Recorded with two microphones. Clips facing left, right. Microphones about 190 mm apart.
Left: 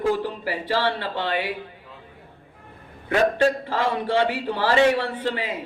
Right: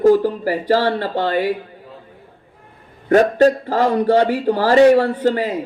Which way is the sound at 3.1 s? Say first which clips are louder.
Right 7 dB; 40° right (ahead or behind).